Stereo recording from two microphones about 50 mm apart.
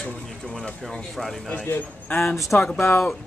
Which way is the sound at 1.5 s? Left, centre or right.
Left.